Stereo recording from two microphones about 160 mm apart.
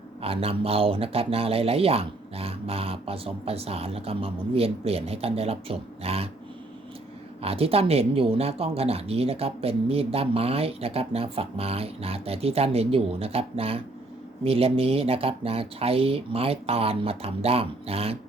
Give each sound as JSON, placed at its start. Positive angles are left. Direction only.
{"t": 0.2, "sound": "speech", "side_deg": -35}
{"t": 7.4, "sound": "speech", "side_deg": -40}